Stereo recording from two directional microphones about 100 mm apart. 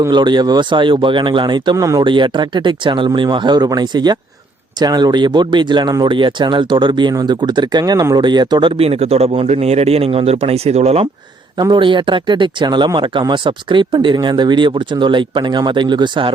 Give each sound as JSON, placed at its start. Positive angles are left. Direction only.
{"t": 0.1, "sound": "speech", "side_deg": -50}
{"t": 2.0, "sound": "speech", "side_deg": -55}
{"t": 8.8, "sound": "speech", "side_deg": -85}
{"t": 11.6, "sound": "speech", "side_deg": -50}